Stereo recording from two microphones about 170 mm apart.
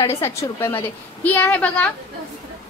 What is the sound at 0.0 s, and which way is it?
A woman's voice, 15° left (ahead or behind).